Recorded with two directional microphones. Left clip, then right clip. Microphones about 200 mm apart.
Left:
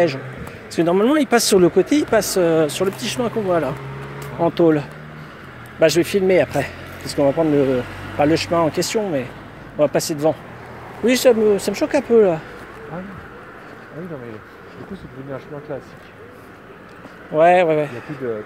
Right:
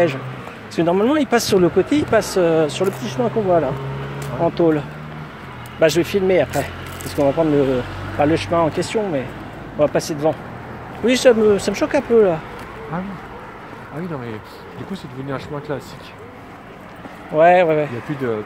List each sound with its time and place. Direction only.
0.7 s speech: 35° left (ahead or behind)
4.4 s speech: 40° left (ahead or behind)
15.7 s speech: 50° right (ahead or behind)
17.4 s speech: 30° left (ahead or behind)